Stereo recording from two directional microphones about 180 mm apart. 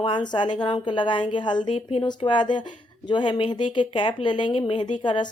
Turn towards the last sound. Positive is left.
turn(degrees=25)  # may be behind; listen again after turning